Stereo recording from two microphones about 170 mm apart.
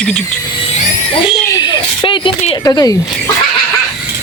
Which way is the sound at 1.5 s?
25° left (ahead or behind).